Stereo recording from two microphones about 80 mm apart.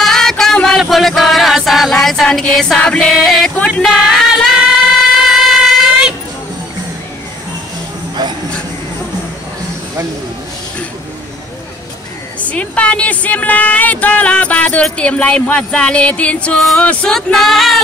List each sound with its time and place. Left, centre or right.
0.0 s music: centre
3.5 s speech: centre
4.0 s music: centre
12.4 s speech: centre
16.5 s music: centre
16.8 s speech: centre
17.1 s music: centre